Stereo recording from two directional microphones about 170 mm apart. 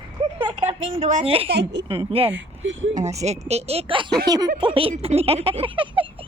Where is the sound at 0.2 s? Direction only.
35° right (ahead or behind).